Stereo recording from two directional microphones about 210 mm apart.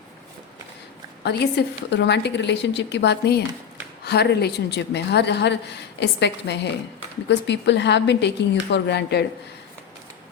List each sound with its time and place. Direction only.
1.2 s a woman's voice: 50° left (ahead or behind)